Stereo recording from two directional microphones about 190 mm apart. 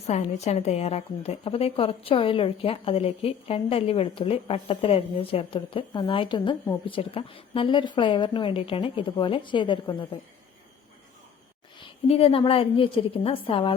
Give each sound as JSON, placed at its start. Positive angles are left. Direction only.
{"t": 0.1, "sound": "a woman's voice", "side_deg": 35}
{"t": 11.8, "sound": "a woman's voice", "side_deg": 30}